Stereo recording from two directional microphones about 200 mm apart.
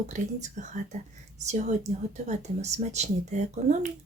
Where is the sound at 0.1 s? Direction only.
35° right (ahead or behind).